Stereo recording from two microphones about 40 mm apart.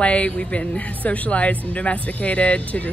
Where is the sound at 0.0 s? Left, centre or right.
Left.